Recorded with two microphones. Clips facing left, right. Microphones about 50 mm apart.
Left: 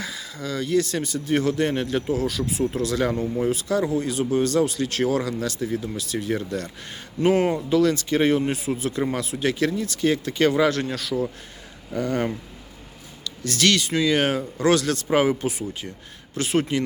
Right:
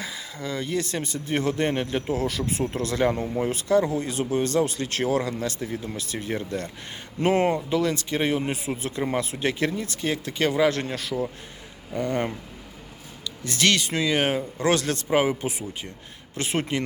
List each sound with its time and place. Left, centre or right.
0.0 s a sound: right
0.7 s speech: right
2.1 s speech: right
3.8 s speech: right
5.8 s speech: right; by 8.4 s centre
8.4 s speech: right
10.0 s speech: centre
10.7 s speech: right
14.1 s speech: centre
14.6 s speech: right
15.1 s speech: centre
15.4 s speech: right